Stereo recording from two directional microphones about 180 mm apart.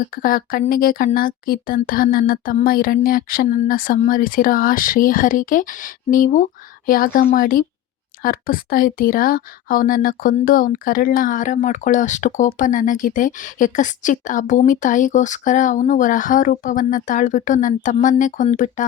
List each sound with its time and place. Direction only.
0.0 s speech: 50° left (ahead or behind)